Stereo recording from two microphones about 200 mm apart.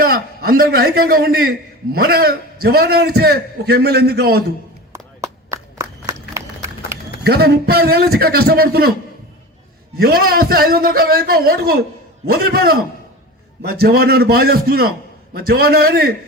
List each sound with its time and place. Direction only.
0.0 s a man's voice: 45° right (ahead or behind)
4.9 s a sound: 15° right (ahead or behind)
7.3 s a man's voice: 50° right (ahead or behind)
10.0 s a man's voice: 50° right (ahead or behind)